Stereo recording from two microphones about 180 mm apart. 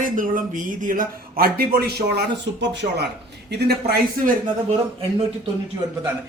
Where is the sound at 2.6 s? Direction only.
75° right (ahead or behind).